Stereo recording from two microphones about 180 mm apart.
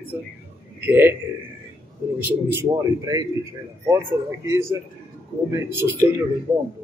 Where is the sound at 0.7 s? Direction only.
10° right (ahead or behind).